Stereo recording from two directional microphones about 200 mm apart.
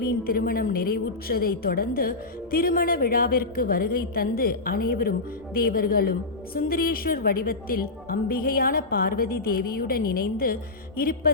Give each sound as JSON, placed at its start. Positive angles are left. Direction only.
{"t": 0.0, "sound": "a woman's voice", "side_deg": 45}